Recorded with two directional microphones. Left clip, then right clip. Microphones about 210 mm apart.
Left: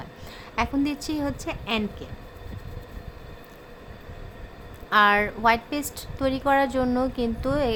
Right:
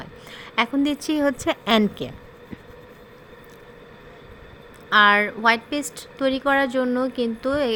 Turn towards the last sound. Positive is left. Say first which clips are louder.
# right 2 dB
turn(degrees=-5)  # may be behind; listen again after turning